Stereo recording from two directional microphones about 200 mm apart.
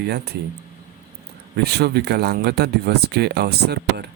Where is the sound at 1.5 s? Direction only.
55° right (ahead or behind).